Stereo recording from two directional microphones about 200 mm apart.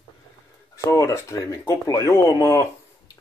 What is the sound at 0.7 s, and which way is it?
Speech, 15° left (ahead or behind).